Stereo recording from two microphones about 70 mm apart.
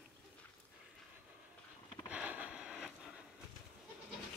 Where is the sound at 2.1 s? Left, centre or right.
Centre.